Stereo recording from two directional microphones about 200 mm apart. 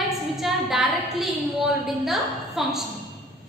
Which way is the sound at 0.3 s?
Centre (ahead or behind).